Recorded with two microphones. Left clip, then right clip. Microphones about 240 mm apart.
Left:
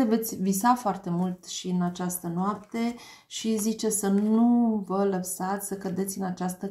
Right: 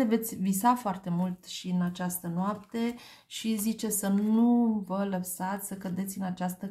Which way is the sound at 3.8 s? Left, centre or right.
Right.